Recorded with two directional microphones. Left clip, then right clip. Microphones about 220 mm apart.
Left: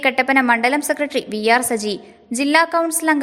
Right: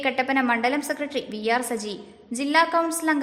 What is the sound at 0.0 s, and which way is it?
A woman's voice, 30° left (ahead or behind).